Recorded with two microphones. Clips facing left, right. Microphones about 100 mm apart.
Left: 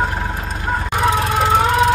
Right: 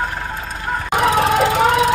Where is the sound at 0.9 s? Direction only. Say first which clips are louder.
Right 4 dB; 90° right.